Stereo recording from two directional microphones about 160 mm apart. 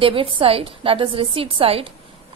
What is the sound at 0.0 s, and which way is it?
A woman's voice, 35° right (ahead or behind).